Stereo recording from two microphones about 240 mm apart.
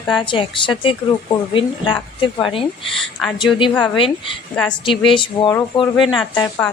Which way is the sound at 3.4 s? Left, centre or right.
Centre.